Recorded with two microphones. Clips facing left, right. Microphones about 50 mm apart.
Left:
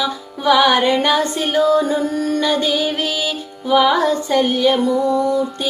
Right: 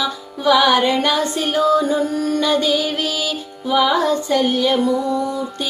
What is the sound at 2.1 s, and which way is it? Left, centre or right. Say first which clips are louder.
Music: even; left.